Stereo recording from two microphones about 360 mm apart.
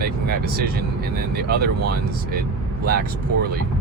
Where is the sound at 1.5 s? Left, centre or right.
Right.